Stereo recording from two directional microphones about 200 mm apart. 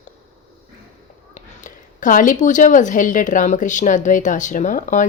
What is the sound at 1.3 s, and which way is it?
Speech, 40° left (ahead or behind).